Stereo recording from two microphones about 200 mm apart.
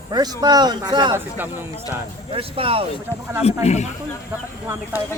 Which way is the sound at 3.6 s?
35° left (ahead or behind).